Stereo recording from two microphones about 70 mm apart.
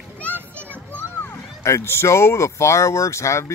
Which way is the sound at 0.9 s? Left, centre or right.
Left.